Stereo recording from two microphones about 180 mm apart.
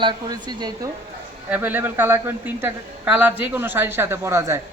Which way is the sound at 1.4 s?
10° right (ahead or behind).